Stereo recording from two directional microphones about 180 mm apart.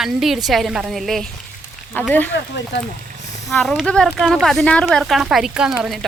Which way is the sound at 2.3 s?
70° left (ahead or behind).